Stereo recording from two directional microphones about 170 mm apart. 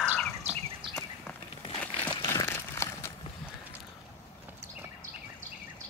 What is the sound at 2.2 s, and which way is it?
Crumpling, 20° left (ahead or behind).